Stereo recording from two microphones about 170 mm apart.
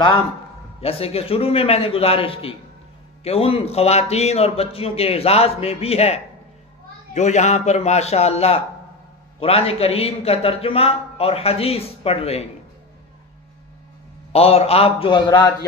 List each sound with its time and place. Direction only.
0.7 s a man's voice: 35° left (ahead or behind)
14.3 s a man's voice: 35° left (ahead or behind)